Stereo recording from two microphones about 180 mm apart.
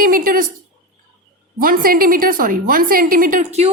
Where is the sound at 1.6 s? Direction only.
50° right (ahead or behind).